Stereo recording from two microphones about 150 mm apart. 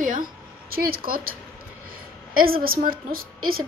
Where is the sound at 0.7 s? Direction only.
75° right (ahead or behind).